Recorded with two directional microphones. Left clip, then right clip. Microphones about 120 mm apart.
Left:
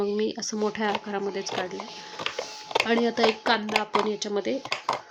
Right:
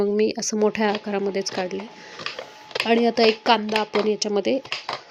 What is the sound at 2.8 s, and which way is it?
Speech, 25° right (ahead or behind).